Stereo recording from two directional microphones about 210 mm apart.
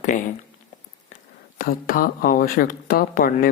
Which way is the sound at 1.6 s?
40° left (ahead or behind).